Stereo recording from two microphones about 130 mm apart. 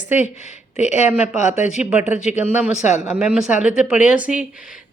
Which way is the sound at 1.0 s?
15° right (ahead or behind).